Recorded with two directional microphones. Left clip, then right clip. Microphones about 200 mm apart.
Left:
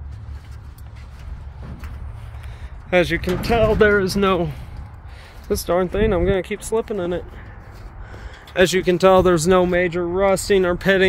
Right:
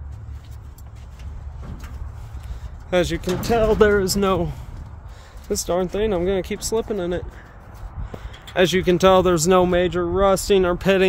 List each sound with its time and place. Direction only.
2.9 s speech: 5° right (ahead or behind)
8.5 s speech: 5° left (ahead or behind)